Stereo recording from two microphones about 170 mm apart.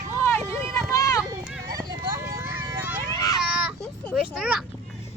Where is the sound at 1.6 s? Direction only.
25° right (ahead or behind).